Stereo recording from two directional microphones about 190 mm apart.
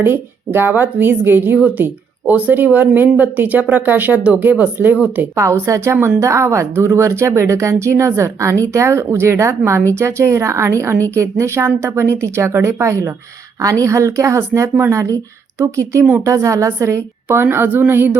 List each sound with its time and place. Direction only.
0.0 s speech: 10° right (ahead or behind)